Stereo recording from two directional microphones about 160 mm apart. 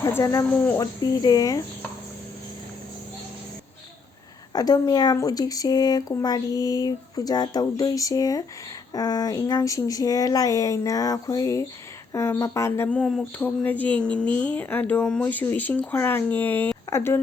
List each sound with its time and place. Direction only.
0.0 s speech: 20° left (ahead or behind)
4.5 s speech: 25° left (ahead or behind)